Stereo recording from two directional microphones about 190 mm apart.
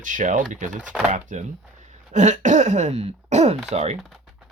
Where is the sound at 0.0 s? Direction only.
40° right (ahead or behind).